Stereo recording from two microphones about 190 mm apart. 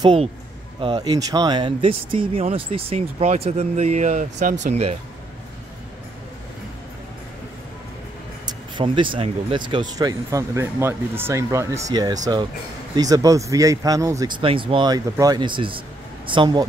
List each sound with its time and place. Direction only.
0.0 s speech: 30° right (ahead or behind)
8.5 s speech: 25° right (ahead or behind)